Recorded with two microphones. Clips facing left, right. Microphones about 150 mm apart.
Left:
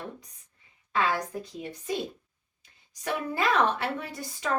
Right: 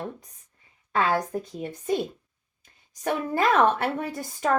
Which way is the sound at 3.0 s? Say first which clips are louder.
Right 4 dB; 50° right (ahead or behind).